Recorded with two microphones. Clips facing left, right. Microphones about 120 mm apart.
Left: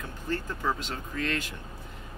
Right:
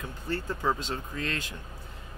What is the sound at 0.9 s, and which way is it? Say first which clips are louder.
Speech: left 1 dB; 30° right (ahead or behind).